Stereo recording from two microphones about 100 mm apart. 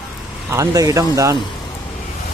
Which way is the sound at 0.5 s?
35° right (ahead or behind).